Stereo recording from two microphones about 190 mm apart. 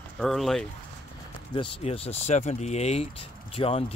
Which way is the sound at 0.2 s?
Centre (ahead or behind).